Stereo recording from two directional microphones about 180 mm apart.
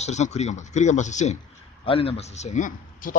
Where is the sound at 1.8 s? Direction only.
30° left (ahead or behind).